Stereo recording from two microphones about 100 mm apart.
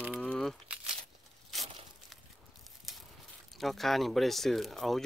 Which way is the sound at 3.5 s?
Centre (ahead or behind).